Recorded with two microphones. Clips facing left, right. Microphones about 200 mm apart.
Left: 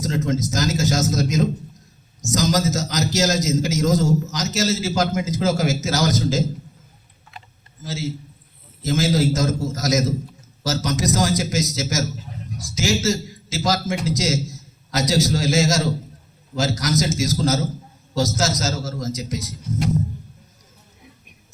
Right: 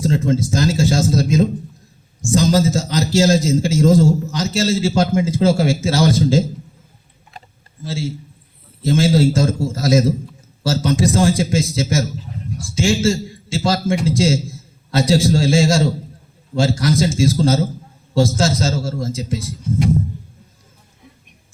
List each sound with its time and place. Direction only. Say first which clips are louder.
0.0 s a man's voice: right 5 dB; 30° right (ahead or behind)
7.9 s a man's voice: right 3 dB; 30° right (ahead or behind)